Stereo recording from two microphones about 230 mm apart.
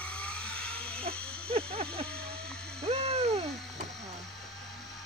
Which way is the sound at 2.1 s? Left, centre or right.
Right.